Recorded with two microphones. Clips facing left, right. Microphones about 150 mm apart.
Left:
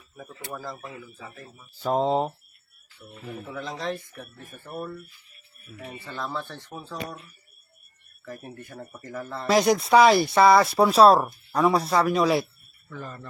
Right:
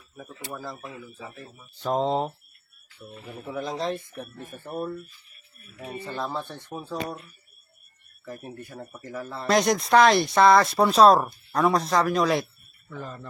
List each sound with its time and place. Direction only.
0.5 s speech: centre (ahead or behind)
3.4 s speech: 15° right (ahead or behind)
8.2 s speech: 15° right (ahead or behind)
9.5 s speech: 5° left (ahead or behind)